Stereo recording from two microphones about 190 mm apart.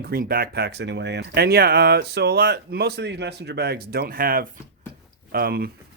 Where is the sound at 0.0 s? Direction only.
50° right (ahead or behind).